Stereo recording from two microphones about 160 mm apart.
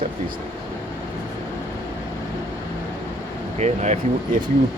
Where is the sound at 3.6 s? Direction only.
45° right (ahead or behind).